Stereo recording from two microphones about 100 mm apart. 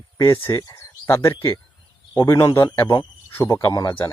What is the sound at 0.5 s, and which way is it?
Speech, 35° left (ahead or behind).